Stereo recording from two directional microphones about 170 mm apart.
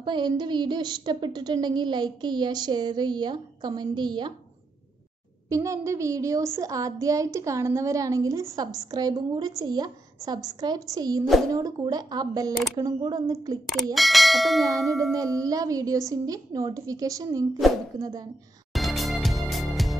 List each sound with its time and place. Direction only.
0.0 s a woman's voice: 25° right (ahead or behind)
5.5 s a woman's voice: 20° right (ahead or behind)
13.9 s speech: centre (ahead or behind)
15.1 s a woman's voice: 20° right (ahead or behind)
18.7 s music: centre (ahead or behind)